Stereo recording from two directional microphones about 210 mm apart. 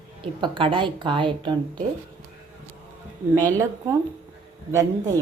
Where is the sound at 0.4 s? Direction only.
25° right (ahead or behind).